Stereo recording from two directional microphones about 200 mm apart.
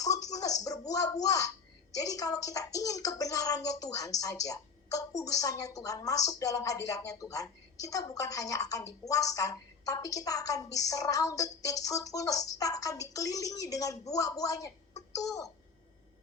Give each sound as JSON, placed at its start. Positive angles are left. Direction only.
{"t": 0.0, "sound": "speech", "side_deg": 20}